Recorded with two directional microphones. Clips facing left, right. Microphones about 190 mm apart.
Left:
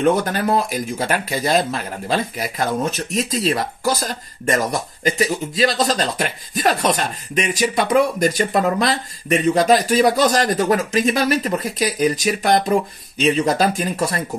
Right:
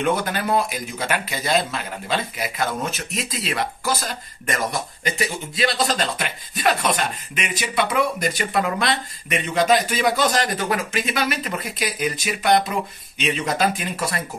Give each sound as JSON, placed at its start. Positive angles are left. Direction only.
{"t": 0.0, "sound": "speech", "side_deg": 40}